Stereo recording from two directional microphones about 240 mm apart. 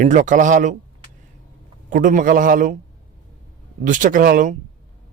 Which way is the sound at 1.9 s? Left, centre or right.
Right.